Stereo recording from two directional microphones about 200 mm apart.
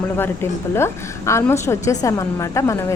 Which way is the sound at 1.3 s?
15° left (ahead or behind).